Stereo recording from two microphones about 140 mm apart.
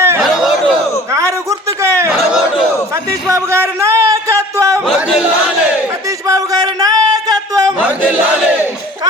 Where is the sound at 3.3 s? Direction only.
20° right (ahead or behind).